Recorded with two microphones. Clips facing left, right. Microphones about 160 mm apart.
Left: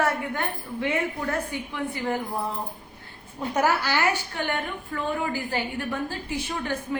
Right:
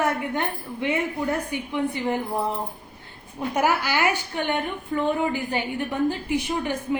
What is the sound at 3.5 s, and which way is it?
Speech, 10° right (ahead or behind).